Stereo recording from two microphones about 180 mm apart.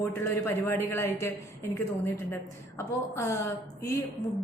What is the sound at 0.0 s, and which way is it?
A woman's voice, 15° left (ahead or behind).